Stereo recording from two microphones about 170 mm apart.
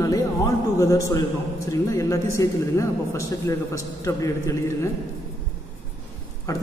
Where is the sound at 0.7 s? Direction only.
20° left (ahead or behind).